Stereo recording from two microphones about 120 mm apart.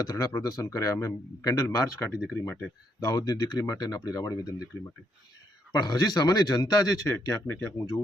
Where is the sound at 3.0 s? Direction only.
35° left (ahead or behind).